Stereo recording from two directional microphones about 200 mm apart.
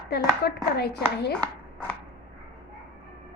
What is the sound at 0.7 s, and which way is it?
Speech, 55° left (ahead or behind).